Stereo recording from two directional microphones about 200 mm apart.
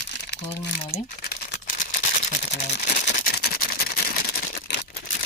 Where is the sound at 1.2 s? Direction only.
50° left (ahead or behind).